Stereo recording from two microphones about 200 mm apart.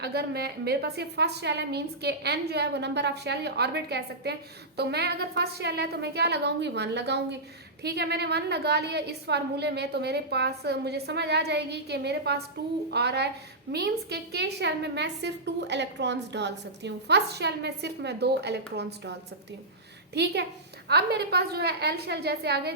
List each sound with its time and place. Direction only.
0.0 s a woman's voice: 55° right (ahead or behind)
20.1 s a woman's voice: 55° right (ahead or behind)